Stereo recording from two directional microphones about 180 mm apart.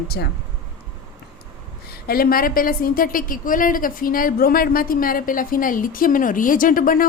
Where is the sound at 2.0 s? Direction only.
55° left (ahead or behind).